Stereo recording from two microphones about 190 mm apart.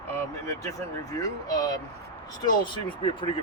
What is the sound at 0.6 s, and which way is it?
Speech, 15° left (ahead or behind).